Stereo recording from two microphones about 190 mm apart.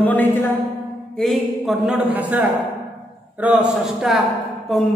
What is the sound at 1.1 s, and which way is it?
A man's voice, centre (ahead or behind).